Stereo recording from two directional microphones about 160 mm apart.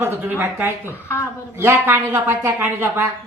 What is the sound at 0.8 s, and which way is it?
Speech, 15° left (ahead or behind).